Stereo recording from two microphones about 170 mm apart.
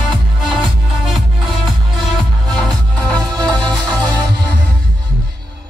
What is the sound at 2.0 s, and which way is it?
Music, 5° left (ahead or behind).